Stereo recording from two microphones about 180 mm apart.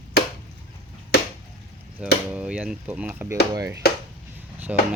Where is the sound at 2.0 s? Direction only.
5° right (ahead or behind).